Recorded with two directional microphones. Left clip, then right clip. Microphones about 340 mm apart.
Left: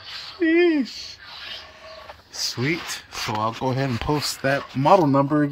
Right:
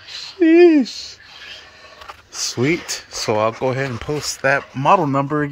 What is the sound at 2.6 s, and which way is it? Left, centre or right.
Speech, centre.